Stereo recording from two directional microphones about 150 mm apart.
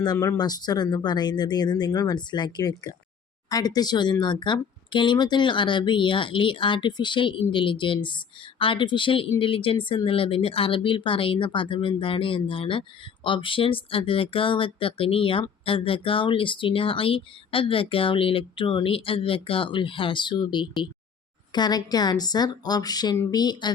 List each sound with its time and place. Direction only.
0.0 s speech: 25° left (ahead or behind)